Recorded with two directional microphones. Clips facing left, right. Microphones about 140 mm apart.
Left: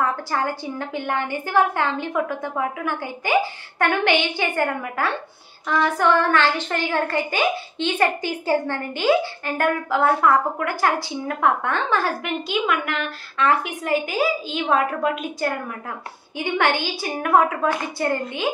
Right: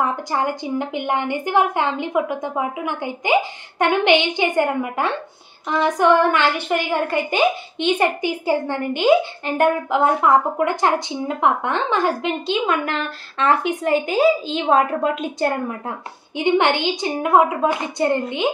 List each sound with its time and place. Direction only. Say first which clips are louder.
0.0 s a woman's voice: right 2 dB; 20° right (ahead or behind)